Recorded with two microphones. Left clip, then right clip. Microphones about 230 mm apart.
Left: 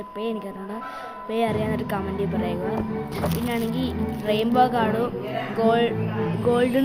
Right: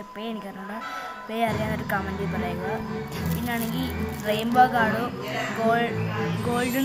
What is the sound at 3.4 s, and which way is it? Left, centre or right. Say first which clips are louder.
A woman's voice: left 3 dB; centre.